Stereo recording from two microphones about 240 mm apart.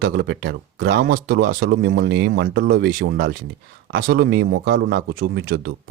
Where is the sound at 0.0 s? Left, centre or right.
Right.